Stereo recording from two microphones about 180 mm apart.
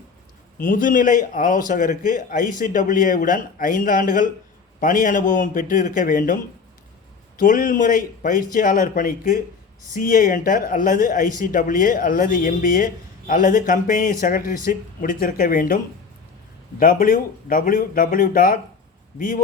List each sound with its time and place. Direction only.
0.6 s speech: 50° left (ahead or behind)
16.8 s speech: 50° left (ahead or behind)